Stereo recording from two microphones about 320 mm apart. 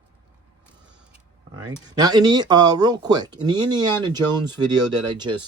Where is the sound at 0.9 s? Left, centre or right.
Centre.